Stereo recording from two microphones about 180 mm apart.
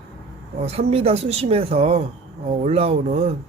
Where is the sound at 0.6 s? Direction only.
35° right (ahead or behind).